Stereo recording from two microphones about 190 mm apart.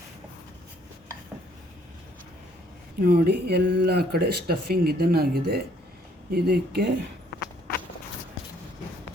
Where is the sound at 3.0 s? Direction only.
55° right (ahead or behind).